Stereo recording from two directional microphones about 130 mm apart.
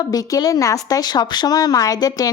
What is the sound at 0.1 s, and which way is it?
A woman's voice, 30° left (ahead or behind).